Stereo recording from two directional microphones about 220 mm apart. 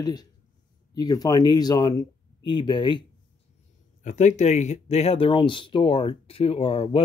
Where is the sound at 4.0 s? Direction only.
35° left (ahead or behind).